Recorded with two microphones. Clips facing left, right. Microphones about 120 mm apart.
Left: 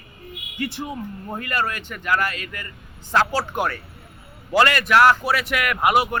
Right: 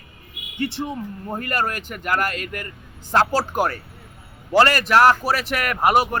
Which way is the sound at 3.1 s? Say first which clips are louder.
Right 2 dB; 35° right (ahead or behind).